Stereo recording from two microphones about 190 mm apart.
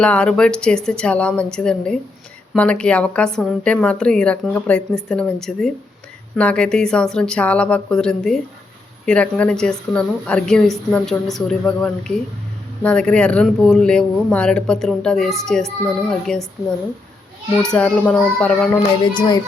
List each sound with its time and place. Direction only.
0.0 s a woman's voice: 5° left (ahead or behind)
17.6 s a woman's voice: 5° left (ahead or behind)
19.1 s music: 20° left (ahead or behind)